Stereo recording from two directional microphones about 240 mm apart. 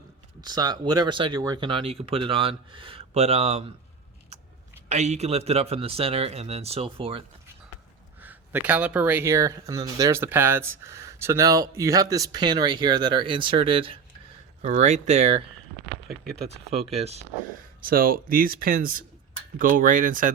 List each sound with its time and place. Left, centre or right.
0.4 s speech: centre
4.9 s speech: right
8.2 s speech: centre; by 15.4 s right
16.0 s speech: centre
16.9 s speech: right
17.7 s speech: right